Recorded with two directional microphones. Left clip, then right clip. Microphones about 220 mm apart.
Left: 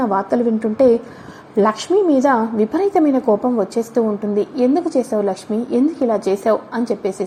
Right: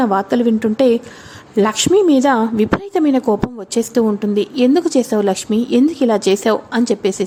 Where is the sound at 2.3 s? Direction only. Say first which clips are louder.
Right 1 dB; 40° right (ahead or behind).